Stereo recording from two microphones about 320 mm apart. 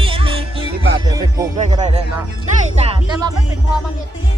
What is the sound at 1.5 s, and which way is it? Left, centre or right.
Speech, right.